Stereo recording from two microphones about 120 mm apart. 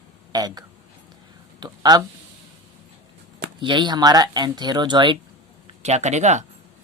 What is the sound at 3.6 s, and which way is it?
Speech, 40° right (ahead or behind).